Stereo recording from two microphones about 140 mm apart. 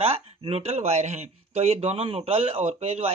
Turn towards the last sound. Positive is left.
turn(degrees=-50)  # may be behind; listen again after turning